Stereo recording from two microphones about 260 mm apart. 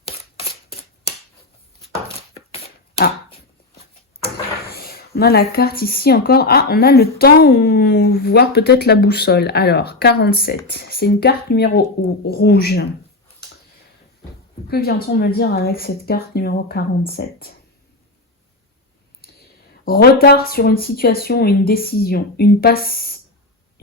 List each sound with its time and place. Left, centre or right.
0.0 s a sound: left
4.6 s speech: left
14.7 s speech: left
19.4 s speech: left